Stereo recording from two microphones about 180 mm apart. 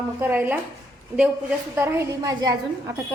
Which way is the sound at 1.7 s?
15° right (ahead or behind).